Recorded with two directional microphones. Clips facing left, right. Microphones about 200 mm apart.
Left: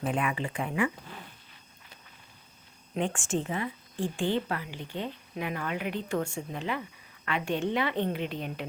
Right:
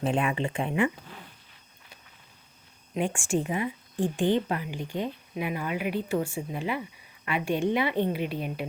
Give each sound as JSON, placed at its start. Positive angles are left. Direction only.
{"t": 0.0, "sound": "speech", "side_deg": -25}
{"t": 2.9, "sound": "speech", "side_deg": -10}